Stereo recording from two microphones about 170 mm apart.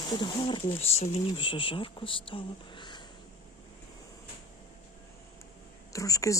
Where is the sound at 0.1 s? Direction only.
25° left (ahead or behind).